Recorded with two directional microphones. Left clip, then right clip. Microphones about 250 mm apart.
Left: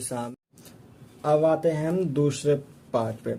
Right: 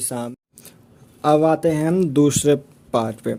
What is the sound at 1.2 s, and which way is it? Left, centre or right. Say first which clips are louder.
Speech: right 5 dB; right.